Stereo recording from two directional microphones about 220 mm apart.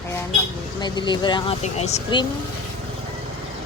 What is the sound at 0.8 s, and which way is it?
Speech, 20° left (ahead or behind).